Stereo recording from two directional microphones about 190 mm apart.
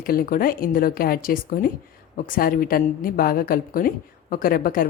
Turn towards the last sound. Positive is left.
turn(degrees=50)  # may be behind; listen again after turning